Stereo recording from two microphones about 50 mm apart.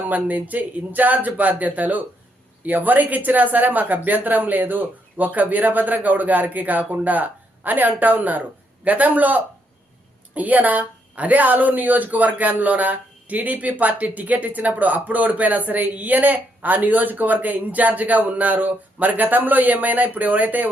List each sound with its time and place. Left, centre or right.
0.1 s a woman's voice: right